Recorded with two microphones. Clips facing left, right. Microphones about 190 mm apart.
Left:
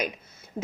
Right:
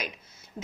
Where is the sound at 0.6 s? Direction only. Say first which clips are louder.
Left 10 dB; 45° left (ahead or behind).